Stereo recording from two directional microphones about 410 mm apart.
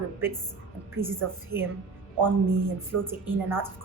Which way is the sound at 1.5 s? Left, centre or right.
Right.